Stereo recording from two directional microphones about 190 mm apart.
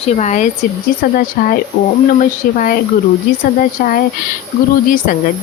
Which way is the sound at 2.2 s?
45° left (ahead or behind).